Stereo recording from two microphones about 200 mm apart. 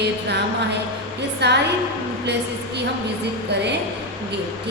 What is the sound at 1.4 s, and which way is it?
Speech, 55° right (ahead or behind).